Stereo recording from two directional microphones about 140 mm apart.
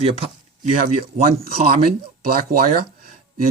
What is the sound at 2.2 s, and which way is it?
Speech, 90° right.